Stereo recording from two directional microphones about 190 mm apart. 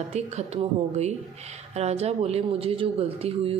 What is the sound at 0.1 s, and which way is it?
Speech, 35° right (ahead or behind).